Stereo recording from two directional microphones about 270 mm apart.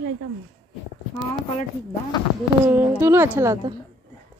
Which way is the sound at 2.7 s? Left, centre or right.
Centre.